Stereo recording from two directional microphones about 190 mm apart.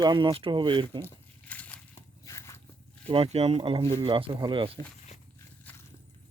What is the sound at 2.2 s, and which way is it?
Biting, 15° left (ahead or behind).